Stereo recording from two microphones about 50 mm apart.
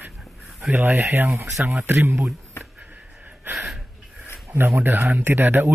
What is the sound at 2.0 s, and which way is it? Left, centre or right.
Speech, right.